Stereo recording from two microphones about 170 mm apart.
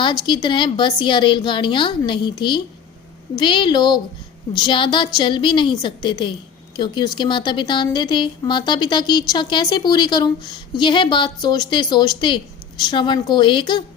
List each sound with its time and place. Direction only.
0.0 s speech: 25° left (ahead or behind)